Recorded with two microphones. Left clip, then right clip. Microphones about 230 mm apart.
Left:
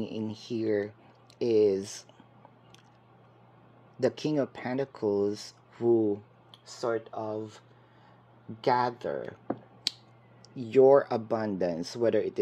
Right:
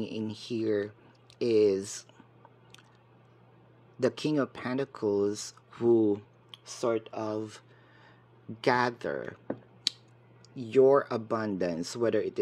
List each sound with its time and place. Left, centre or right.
0.0 s speech: centre
4.0 s speech: centre
6.5 s a sound: right
6.9 s speech: right
8.5 s speech: centre
9.9 s clicking: centre
10.5 s speech: centre